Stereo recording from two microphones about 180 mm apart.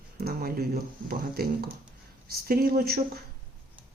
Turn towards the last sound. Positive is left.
turn(degrees=-55)  # may be behind; listen again after turning